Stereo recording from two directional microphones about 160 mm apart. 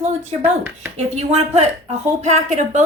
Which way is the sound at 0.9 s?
40° right (ahead or behind).